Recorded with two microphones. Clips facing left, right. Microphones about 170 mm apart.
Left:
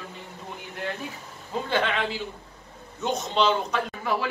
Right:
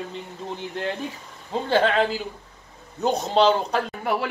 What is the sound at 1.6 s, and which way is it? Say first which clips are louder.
A man's voice: right 7 dB; 35° right (ahead or behind).